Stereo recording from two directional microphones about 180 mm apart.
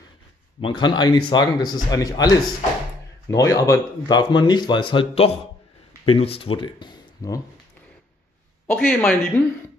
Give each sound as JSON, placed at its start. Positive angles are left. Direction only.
{"t": 0.6, "sound": "speech", "side_deg": 25}
{"t": 8.7, "sound": "speech", "side_deg": 0}